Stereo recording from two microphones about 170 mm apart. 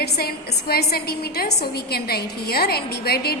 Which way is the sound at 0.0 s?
65° left (ahead or behind).